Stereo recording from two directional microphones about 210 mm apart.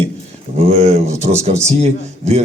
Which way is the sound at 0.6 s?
30° right (ahead or behind).